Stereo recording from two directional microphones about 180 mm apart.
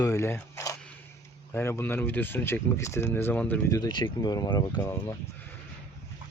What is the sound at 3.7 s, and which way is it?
Speech, 25° left (ahead or behind).